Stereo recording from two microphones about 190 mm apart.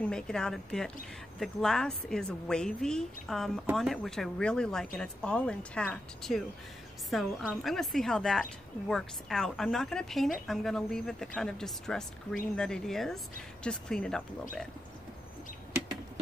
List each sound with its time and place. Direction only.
0.1 s a woman's voice: 5° left (ahead or behind)